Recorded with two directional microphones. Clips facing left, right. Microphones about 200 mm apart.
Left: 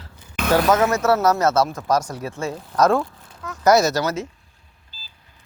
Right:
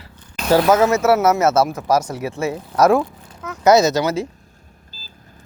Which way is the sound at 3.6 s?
20° right (ahead or behind).